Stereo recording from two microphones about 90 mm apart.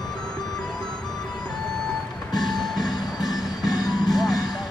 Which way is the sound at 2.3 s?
50° left (ahead or behind).